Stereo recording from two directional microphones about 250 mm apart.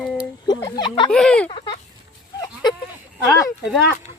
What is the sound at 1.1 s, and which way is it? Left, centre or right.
Speech, centre.